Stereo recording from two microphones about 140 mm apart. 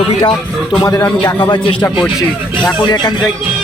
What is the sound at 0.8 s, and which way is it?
Speech, 25° left (ahead or behind).